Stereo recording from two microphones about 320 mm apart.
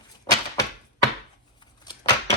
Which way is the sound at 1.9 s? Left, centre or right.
Centre.